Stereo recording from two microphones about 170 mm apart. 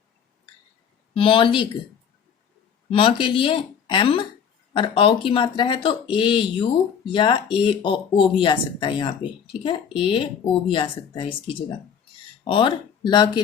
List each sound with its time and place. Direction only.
1.1 s speech: 30° left (ahead or behind)
2.9 s speech: 30° left (ahead or behind)
12.5 s speech: 30° left (ahead or behind)